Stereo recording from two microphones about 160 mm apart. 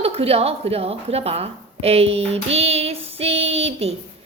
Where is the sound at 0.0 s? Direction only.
40° right (ahead or behind).